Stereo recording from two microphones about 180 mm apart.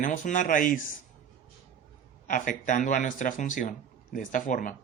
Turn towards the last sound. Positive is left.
turn(degrees=45)  # may be behind; listen again after turning